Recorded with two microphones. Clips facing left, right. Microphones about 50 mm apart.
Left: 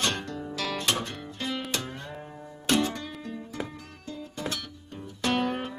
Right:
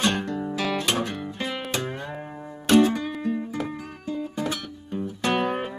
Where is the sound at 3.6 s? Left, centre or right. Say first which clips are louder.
Right 8 dB; centre.